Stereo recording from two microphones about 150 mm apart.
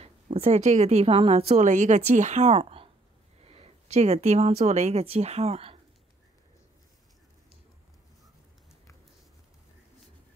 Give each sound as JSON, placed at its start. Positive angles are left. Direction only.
{"t": 0.0, "sound": "speech", "side_deg": -45}